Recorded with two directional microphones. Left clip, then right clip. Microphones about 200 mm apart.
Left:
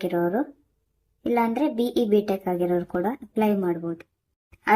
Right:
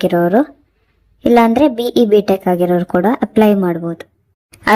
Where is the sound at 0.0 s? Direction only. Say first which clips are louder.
Right 12 dB; 40° right (ahead or behind).